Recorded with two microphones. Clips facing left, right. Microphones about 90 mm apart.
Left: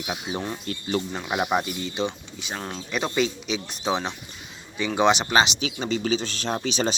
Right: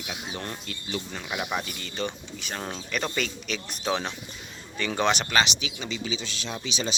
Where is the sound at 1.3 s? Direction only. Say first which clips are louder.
Left 6 dB; 30° left (ahead or behind).